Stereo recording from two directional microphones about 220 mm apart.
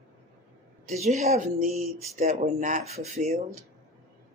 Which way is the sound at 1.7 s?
Centre (ahead or behind).